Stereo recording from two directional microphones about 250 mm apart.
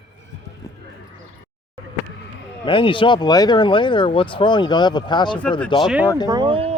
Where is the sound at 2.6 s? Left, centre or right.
Centre.